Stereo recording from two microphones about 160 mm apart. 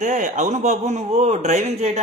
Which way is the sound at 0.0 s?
50° right (ahead or behind).